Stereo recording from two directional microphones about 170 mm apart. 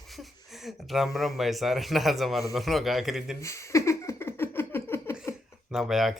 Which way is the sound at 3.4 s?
15° left (ahead or behind).